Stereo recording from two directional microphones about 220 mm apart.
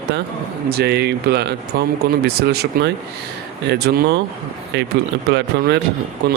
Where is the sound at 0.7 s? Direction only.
50° right (ahead or behind).